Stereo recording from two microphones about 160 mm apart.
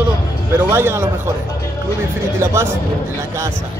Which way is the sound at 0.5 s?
15° right (ahead or behind).